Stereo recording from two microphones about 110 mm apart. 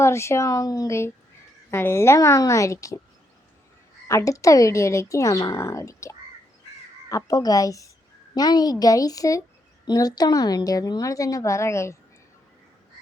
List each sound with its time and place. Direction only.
0.0 s speech: 25° left (ahead or behind)
4.1 s a woman's voice: 30° left (ahead or behind)